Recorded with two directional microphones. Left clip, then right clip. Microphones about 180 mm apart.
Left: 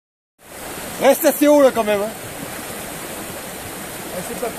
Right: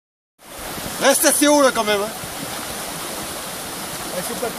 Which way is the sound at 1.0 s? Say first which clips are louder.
Left 2 dB; 40° left (ahead or behind).